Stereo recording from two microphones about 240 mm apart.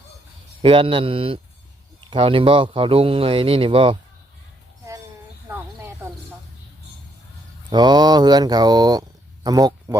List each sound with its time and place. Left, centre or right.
0.6 s speech: right
7.7 s speech: centre